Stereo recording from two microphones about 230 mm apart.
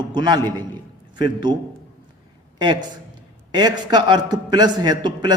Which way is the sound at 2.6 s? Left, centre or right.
Centre.